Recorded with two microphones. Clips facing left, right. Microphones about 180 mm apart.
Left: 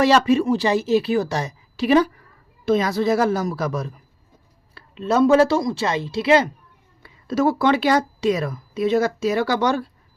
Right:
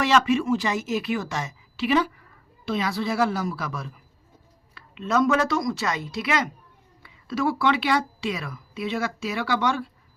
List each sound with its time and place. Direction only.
0.0 s a woman's voice: 40° left (ahead or behind)
7.0 s speech: 40° left (ahead or behind)